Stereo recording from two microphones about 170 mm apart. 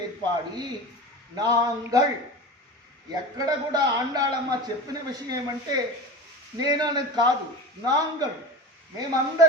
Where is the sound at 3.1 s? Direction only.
25° right (ahead or behind).